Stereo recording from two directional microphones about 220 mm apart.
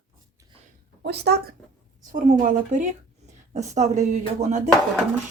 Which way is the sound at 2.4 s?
35° right (ahead or behind).